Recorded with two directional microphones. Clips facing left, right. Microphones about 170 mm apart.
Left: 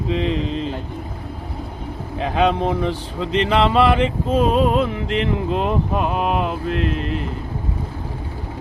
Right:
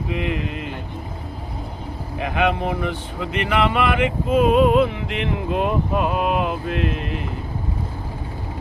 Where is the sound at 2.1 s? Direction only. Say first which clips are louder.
Left 3 dB; 30° left (ahead or behind).